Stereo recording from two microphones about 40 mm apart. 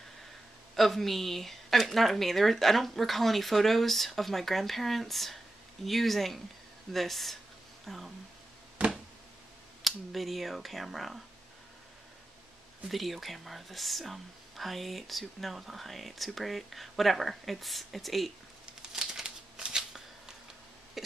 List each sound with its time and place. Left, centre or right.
0.7 s speech: centre
9.8 s speech: centre
12.8 s speech: centre
18.9 s shuffling cards: centre